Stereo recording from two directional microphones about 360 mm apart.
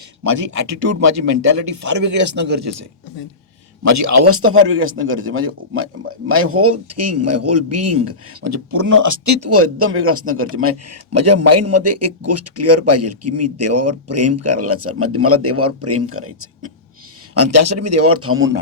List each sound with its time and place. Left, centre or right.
0.3 s speech: right
3.8 s a man's voice: right